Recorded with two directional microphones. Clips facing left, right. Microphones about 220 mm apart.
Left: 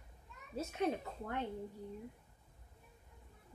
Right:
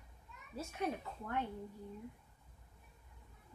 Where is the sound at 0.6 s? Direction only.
20° left (ahead or behind).